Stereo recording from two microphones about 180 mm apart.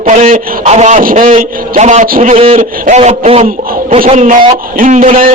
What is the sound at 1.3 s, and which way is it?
A man's voice, 40° right (ahead or behind).